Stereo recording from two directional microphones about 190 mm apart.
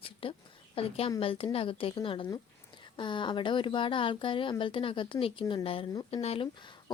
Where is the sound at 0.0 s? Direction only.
30° left (ahead or behind).